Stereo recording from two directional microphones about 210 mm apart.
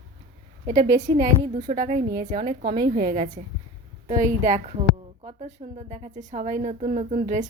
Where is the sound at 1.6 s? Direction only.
40° right (ahead or behind).